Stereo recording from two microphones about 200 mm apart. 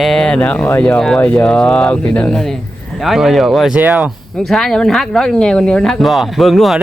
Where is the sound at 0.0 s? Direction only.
Centre (ahead or behind).